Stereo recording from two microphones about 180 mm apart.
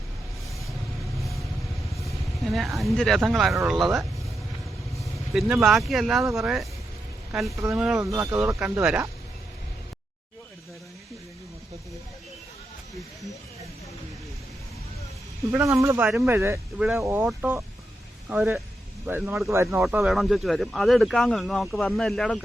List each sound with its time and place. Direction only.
2.0 s speech: centre (ahead or behind)
5.3 s speech: centre (ahead or behind)
7.5 s speech: 15° right (ahead or behind)
15.5 s speech: 15° right (ahead or behind); by 22.4 s centre (ahead or behind)